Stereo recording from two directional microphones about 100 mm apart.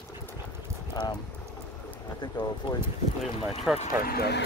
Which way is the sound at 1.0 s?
35° left (ahead or behind).